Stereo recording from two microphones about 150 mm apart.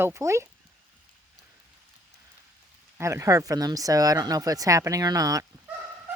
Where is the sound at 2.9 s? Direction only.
20° right (ahead or behind).